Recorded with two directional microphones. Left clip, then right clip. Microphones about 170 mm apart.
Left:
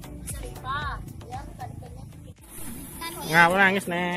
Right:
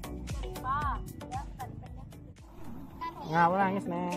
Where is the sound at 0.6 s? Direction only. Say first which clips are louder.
Left 1 dB; 20° left (ahead or behind).